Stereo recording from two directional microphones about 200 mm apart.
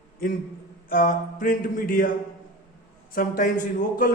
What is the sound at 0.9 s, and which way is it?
A man's voice, 40° left (ahead or behind).